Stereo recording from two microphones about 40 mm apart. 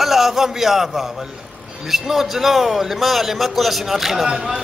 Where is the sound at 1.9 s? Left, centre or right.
Centre.